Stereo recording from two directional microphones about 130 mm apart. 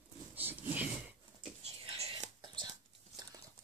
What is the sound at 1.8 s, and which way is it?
Whispering, 45° right (ahead or behind).